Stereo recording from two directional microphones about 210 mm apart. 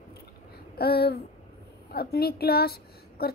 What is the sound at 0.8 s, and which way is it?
A woman's voice, 50° left (ahead or behind).